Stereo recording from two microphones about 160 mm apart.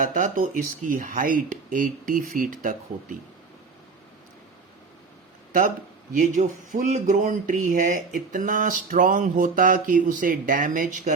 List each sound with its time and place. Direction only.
0.0 s speech: 55° right (ahead or behind)
5.5 s speech: 60° right (ahead or behind)